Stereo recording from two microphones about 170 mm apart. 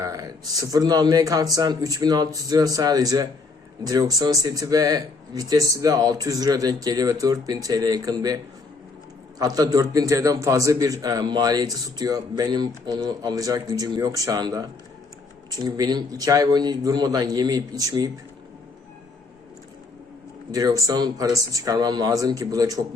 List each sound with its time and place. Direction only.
0.0 s a man's voice: 20° right (ahead or behind)
9.4 s a man's voice: 20° right (ahead or behind)
20.5 s a man's voice: 20° right (ahead or behind)